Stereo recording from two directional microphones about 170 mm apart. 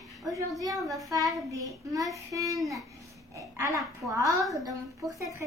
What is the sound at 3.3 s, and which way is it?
A child's voice, 20° right (ahead or behind).